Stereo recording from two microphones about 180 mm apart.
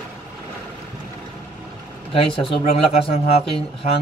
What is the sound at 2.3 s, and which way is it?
Speech, 30° left (ahead or behind).